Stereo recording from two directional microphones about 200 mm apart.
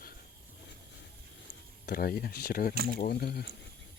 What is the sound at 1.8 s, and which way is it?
Speech, 50° left (ahead or behind).